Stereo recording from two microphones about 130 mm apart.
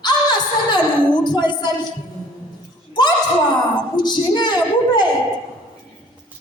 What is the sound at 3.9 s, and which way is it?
A woman's voice, 35° left (ahead or behind).